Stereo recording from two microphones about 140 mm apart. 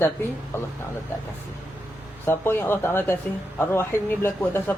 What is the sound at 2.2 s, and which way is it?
Speech, 15° left (ahead or behind).